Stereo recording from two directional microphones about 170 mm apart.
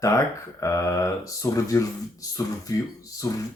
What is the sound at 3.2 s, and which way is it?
Speech, 20° left (ahead or behind).